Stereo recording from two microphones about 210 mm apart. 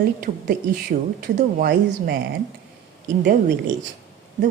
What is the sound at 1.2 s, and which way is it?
Speech, 40° right (ahead or behind).